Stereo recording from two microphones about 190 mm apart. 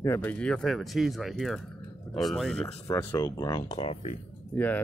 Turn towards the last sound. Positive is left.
turn(degrees=10)  # may be behind; listen again after turning